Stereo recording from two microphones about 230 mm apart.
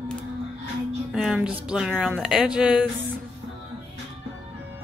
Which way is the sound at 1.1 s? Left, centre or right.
Centre.